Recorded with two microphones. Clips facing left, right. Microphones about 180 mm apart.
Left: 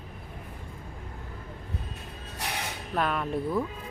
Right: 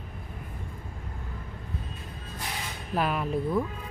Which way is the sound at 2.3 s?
70° left (ahead or behind).